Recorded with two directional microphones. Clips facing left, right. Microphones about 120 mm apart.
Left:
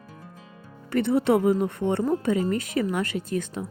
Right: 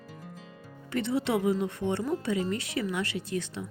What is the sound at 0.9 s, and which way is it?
Speech, 55° left (ahead or behind).